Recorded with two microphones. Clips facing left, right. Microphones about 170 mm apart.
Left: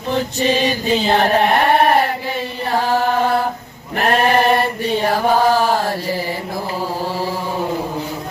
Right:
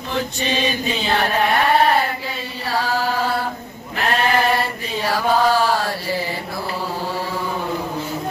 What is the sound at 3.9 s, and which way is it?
Sheep, 45° left (ahead or behind).